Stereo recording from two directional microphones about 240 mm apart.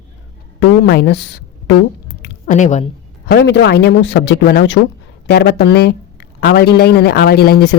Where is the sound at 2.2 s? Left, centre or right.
Left.